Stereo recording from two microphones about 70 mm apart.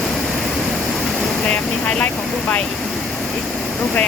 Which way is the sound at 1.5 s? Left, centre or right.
Left.